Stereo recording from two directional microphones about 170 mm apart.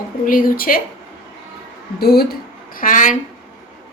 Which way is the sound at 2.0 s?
65° left (ahead or behind).